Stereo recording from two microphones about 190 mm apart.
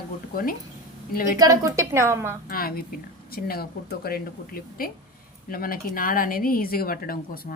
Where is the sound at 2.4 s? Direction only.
50° left (ahead or behind).